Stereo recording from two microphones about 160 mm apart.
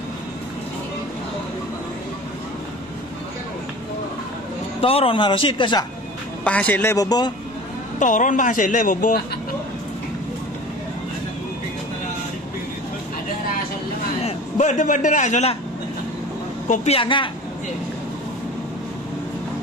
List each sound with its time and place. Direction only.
4.8 s speech: 35° left (ahead or behind)
6.4 s a man's voice: 10° left (ahead or behind); by 7.3 s 25° left (ahead or behind)
8.0 s a man's voice: 55° left (ahead or behind)
14.2 s a man's voice: 50° left (ahead or behind)
16.6 s speech: 45° left (ahead or behind)